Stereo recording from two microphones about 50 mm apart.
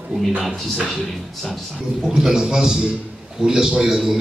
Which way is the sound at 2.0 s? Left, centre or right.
Centre.